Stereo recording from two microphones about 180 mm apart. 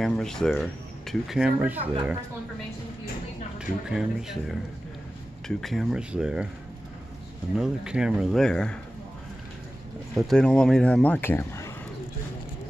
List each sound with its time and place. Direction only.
0.0 s speech: 5° left (ahead or behind)
3.5 s speech: 5° right (ahead or behind)
7.5 s speech: 5° right (ahead or behind)
10.1 s speech: centre (ahead or behind)